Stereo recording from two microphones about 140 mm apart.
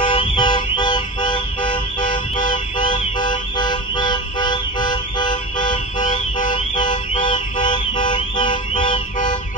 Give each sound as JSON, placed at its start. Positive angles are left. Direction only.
{"t": 0.0, "sound": "car alarm", "side_deg": 35}
{"t": 7.2, "sound": "car alarm", "side_deg": 35}